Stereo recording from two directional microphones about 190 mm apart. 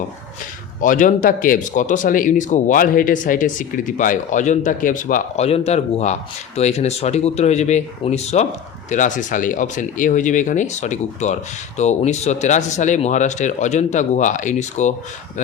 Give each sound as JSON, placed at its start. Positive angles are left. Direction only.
{"t": 0.8, "sound": "speech", "side_deg": 45}